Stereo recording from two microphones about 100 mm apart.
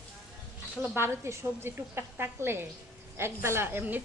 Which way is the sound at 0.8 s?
25° right (ahead or behind).